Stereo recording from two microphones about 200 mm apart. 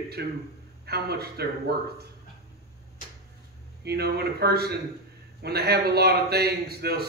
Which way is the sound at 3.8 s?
55° right (ahead or behind).